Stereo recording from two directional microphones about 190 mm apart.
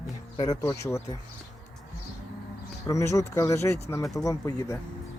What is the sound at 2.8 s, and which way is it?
Speech, 15° left (ahead or behind).